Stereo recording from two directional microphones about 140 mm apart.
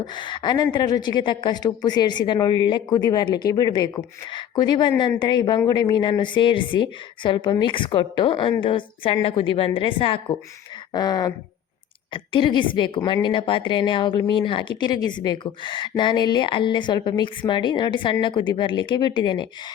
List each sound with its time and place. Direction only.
0.0 s speech: 35° left (ahead or behind)